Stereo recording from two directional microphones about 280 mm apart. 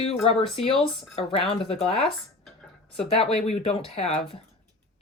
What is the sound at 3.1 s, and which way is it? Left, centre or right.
Speech, left.